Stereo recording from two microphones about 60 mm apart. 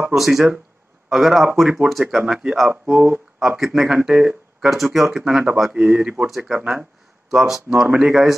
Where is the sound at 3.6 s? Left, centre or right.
Centre.